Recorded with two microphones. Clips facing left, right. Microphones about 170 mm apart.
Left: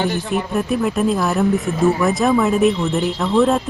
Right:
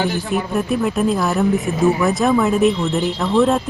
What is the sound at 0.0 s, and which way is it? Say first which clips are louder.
Speech: even; centre (ahead or behind).